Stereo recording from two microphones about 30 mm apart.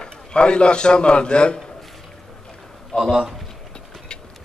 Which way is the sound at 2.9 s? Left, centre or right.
Left.